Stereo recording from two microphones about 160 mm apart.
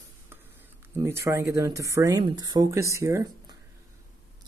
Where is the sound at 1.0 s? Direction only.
20° right (ahead or behind).